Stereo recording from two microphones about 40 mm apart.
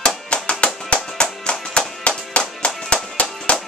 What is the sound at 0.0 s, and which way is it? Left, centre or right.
Music, left.